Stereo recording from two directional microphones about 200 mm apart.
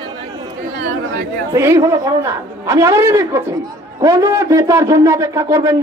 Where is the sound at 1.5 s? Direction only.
15° right (ahead or behind).